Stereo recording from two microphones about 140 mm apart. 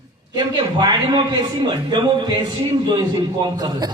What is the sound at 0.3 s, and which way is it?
A man's voice, 30° right (ahead or behind).